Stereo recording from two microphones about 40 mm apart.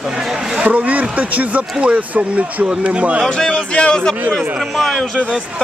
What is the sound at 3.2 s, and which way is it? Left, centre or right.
Speech, centre.